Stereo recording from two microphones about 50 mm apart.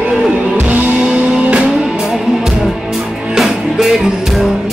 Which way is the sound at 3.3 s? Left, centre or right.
Centre.